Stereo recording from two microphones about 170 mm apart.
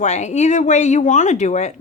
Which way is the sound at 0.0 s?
45° left (ahead or behind).